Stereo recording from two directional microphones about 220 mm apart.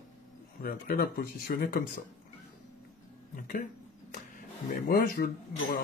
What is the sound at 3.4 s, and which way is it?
Speech, 40° left (ahead or behind).